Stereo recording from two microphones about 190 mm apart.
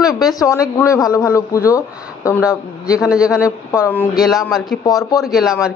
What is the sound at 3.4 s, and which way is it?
Speech, 15° left (ahead or behind).